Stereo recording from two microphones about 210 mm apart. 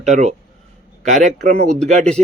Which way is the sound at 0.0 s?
35° right (ahead or behind).